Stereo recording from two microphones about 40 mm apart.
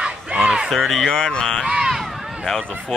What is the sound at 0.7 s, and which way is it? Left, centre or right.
Speech, centre.